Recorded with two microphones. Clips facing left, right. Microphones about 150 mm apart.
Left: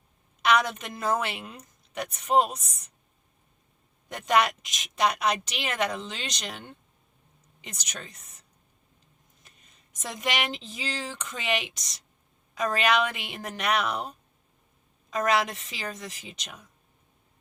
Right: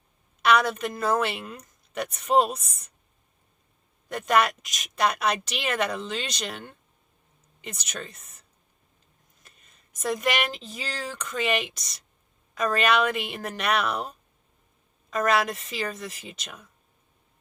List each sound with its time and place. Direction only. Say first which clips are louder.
0.4 s a woman's voice: right 2 dB; 15° left (ahead or behind)
4.1 s a woman's voice: right 1 dB; 20° left (ahead or behind)
9.9 s a woman's voice: right 5 dB; 20° left (ahead or behind)